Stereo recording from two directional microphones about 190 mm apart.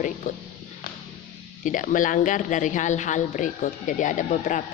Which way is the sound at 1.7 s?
45° left (ahead or behind).